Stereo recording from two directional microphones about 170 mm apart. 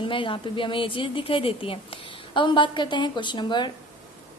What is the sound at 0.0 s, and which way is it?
A woman's voice, 30° left (ahead or behind).